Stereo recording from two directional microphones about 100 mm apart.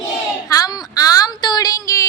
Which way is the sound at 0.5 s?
40° left (ahead or behind).